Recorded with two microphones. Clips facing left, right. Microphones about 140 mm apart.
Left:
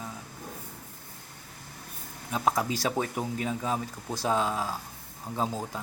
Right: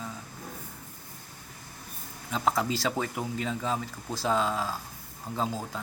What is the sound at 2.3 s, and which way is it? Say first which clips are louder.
Speech: even; 10° left (ahead or behind).